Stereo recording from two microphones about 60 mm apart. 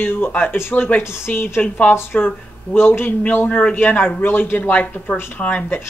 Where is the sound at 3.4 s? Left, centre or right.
Left.